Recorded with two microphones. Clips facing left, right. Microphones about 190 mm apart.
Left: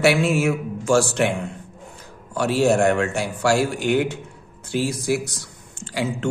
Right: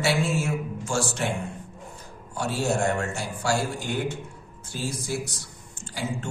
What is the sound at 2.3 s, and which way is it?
A man's voice, 80° left.